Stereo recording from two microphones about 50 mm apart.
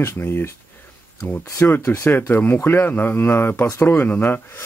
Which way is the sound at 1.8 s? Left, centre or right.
Left.